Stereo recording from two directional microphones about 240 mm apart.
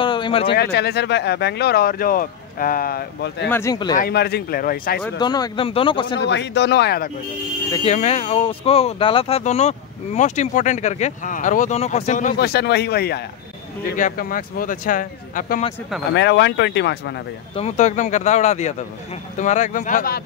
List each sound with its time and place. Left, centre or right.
0.0 s a sound: centre
0.5 s speech: left
3.4 s speech: centre
3.9 s speech: left
5.2 s speech: centre
6.1 s speech: left
7.7 s speech: left
16.2 s speech: left
17.6 s speech: left